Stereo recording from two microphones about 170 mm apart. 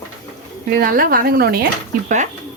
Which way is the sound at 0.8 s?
60° right (ahead or behind).